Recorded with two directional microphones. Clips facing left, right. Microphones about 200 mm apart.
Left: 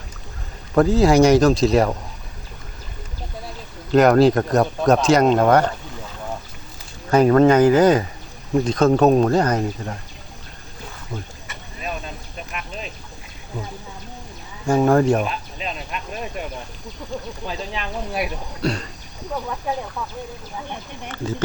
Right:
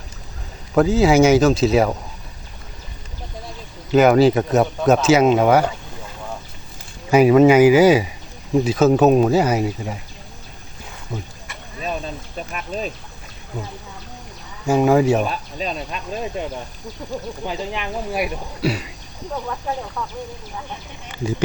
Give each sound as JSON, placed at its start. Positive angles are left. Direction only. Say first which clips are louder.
{"t": 0.7, "sound": "speech", "louder": "even", "side_deg": 0}
{"t": 3.9, "sound": "speech", "louder": "even", "side_deg": -5}
{"t": 7.1, "sound": "speech", "louder": "right 2 dB", "side_deg": -10}
{"t": 12.5, "sound": "speech", "louder": "right 6 dB", "side_deg": -40}
{"t": 14.7, "sound": "speech", "louder": "right 1 dB", "side_deg": -5}
{"t": 15.3, "sound": "speech", "louder": "right 3 dB", "side_deg": -35}
{"t": 17.4, "sound": "speech", "louder": "right 3 dB", "side_deg": -15}
{"t": 21.1, "sound": "speech", "louder": "right 2 dB", "side_deg": -15}